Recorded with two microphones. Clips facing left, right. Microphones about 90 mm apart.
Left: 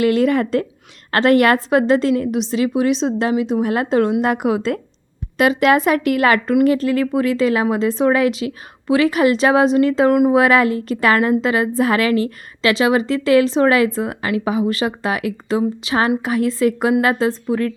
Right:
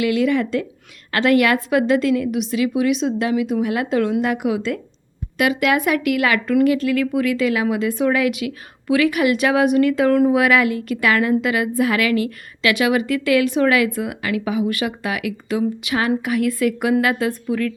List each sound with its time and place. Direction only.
0.0 s a woman's voice: 40° left (ahead or behind)
5.4 s a woman's voice: 35° left (ahead or behind)
10.3 s a woman's voice: 35° left (ahead or behind)